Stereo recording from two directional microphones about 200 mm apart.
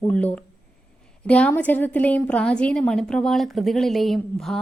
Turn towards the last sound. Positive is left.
turn(degrees=0)  # may be behind; listen again after turning